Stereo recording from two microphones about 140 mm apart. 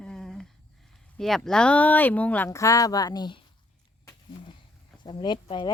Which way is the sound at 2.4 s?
20° left (ahead or behind).